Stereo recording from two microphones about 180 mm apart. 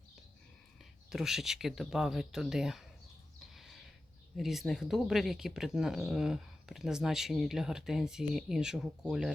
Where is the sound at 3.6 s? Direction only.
Centre (ahead or behind).